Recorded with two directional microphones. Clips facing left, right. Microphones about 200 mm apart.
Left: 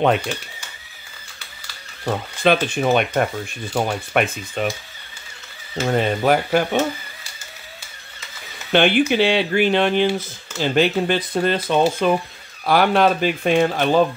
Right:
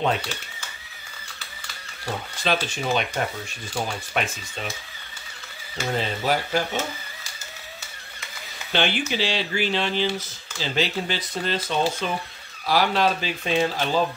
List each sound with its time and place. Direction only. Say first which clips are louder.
2.0 s speech: left 8 dB; 55° left (ahead or behind)
5.8 s speech: left 7 dB; 55° left (ahead or behind)
8.7 s speech: left 9 dB; 55° left (ahead or behind)